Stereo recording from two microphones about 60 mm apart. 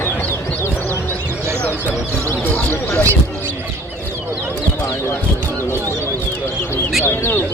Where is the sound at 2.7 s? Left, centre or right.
Left.